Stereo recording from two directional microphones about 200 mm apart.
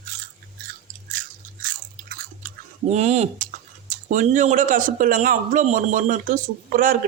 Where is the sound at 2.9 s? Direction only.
35° right (ahead or behind).